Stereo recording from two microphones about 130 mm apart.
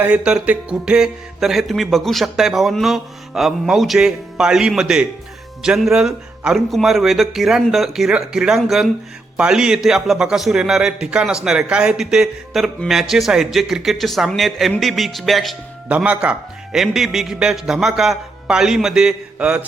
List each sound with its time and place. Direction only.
0.0 s speech: 10° right (ahead or behind)